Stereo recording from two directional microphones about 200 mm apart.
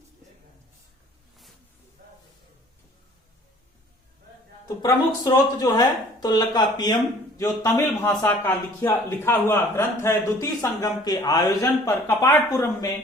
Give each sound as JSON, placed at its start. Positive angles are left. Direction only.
{"t": 4.8, "sound": "a man's voice", "side_deg": 15}